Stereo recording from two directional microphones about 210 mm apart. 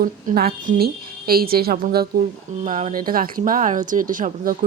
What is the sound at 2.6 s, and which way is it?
Speech, 35° right (ahead or behind).